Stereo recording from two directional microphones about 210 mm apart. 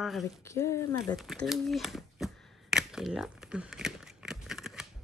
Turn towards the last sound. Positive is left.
turn(degrees=0)  # may be behind; listen again after turning